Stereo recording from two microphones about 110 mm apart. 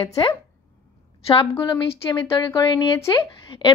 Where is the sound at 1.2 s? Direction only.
55° left (ahead or behind).